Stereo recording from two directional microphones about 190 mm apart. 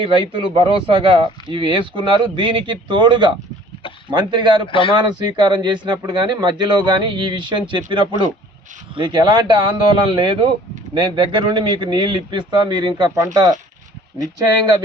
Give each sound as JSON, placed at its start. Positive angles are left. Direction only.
{"t": 0.0, "sound": "speech", "side_deg": -25}